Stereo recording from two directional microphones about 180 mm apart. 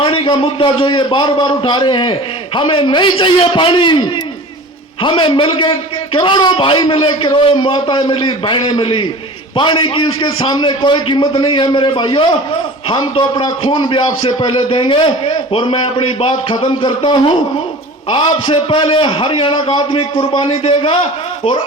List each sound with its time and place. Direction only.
0.0 s a man's voice: 30° left (ahead or behind)
5.0 s a man's voice: 30° left (ahead or behind)